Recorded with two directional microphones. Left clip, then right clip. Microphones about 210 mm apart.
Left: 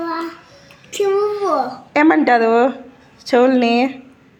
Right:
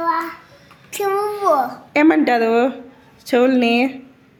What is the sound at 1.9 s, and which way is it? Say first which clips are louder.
Speech: left 2 dB; 5° right (ahead or behind).